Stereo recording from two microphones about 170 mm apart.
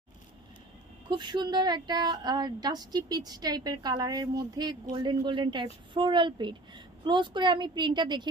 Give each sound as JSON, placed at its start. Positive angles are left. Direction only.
{"t": 1.1, "sound": "speech", "side_deg": -25}